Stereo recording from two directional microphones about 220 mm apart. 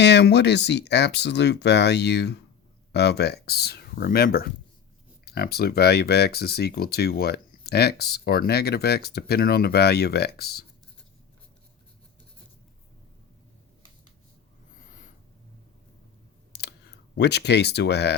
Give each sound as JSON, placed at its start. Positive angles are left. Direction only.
{"t": 0.0, "sound": "speech", "side_deg": 50}
{"t": 17.2, "sound": "speech", "side_deg": 50}